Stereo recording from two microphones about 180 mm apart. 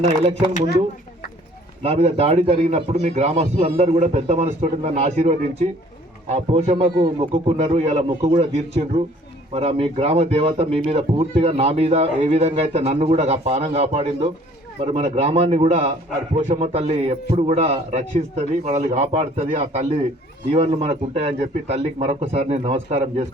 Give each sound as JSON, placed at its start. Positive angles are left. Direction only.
{"t": 1.8, "sound": "speech", "side_deg": -35}